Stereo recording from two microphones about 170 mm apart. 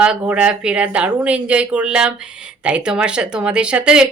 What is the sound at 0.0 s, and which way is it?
A woman's voice, 5° right (ahead or behind).